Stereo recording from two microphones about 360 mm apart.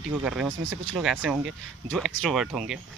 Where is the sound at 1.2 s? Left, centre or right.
Centre.